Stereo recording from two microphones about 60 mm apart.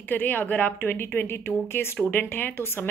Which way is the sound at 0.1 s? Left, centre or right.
Left.